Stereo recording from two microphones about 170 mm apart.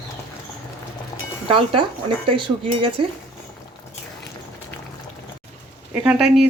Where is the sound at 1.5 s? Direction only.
30° right (ahead or behind).